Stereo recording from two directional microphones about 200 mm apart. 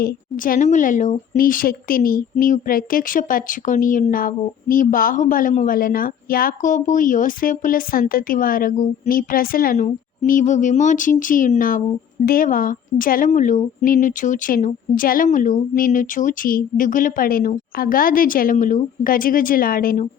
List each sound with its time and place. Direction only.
0.0 s a woman's voice: 45° left (ahead or behind)